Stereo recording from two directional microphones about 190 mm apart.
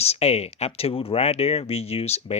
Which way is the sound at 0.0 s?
35° left (ahead or behind).